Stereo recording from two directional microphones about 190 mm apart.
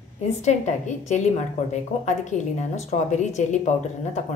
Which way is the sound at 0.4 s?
40° left (ahead or behind).